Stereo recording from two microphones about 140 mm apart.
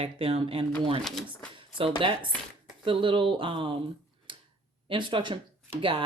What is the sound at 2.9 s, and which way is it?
Speech, 35° right (ahead or behind).